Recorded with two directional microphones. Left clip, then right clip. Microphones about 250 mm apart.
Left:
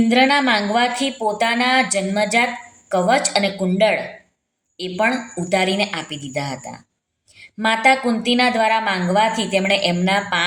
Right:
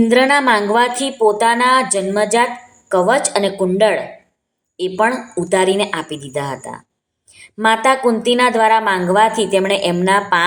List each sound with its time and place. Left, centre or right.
0.0 s a woman's voice: centre